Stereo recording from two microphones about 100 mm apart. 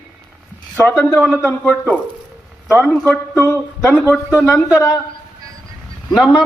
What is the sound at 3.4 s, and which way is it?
Speech, 25° left (ahead or behind).